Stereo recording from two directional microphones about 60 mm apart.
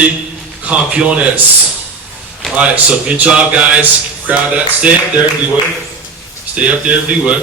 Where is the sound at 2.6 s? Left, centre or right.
Right.